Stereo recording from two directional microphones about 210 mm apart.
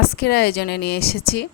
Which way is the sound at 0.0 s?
45° left (ahead or behind).